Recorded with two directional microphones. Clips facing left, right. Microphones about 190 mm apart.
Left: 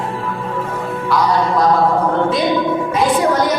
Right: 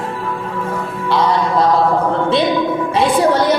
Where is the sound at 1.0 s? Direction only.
25° right (ahead or behind).